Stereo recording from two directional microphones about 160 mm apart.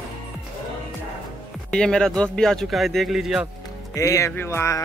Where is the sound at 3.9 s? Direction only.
20° left (ahead or behind).